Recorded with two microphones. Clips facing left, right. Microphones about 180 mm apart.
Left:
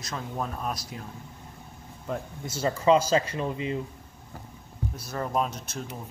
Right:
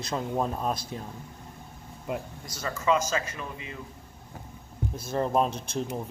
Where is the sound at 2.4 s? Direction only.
30° left (ahead or behind).